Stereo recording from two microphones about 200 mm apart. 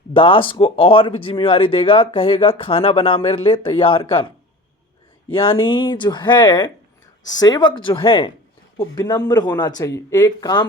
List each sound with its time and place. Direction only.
0.1 s speech: 25° left (ahead or behind)
5.3 s speech: 25° left (ahead or behind)